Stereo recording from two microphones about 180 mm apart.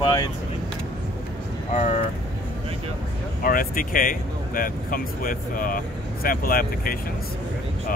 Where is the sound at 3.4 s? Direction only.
50° left (ahead or behind).